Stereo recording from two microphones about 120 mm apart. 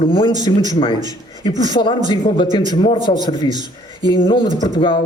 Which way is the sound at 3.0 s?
40° left (ahead or behind).